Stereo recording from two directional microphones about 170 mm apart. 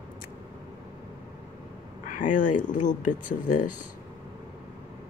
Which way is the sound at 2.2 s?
50° left (ahead or behind).